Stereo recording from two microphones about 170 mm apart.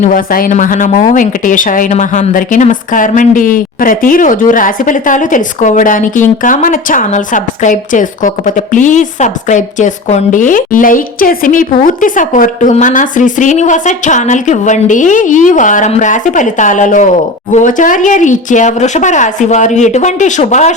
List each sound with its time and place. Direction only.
0.0 s a woman's voice: 55° left (ahead or behind)